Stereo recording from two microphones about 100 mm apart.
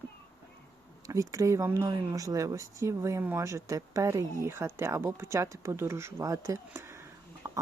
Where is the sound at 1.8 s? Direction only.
40° right (ahead or behind).